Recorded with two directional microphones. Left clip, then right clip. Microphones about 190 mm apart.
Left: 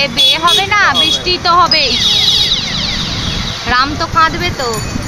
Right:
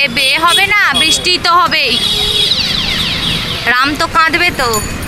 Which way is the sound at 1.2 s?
15° right (ahead or behind).